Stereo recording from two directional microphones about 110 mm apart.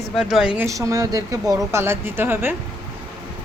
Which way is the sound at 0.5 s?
30° right (ahead or behind).